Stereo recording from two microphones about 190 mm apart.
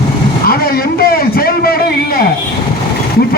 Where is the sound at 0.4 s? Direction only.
55° left (ahead or behind).